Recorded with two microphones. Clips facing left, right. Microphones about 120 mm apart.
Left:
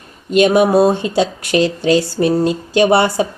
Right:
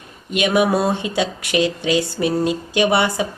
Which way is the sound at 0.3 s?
35° left (ahead or behind).